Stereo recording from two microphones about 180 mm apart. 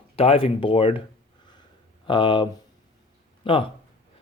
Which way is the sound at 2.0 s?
25° left (ahead or behind).